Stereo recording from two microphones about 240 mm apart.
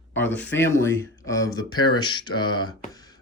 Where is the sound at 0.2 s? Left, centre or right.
Centre.